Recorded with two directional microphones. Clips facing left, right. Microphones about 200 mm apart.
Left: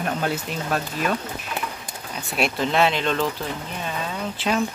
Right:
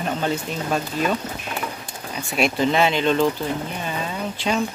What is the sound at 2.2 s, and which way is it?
Speech, centre (ahead or behind).